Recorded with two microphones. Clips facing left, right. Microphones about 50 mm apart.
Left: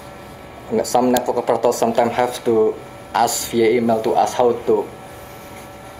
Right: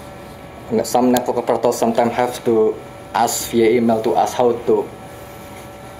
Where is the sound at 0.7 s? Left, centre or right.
Left.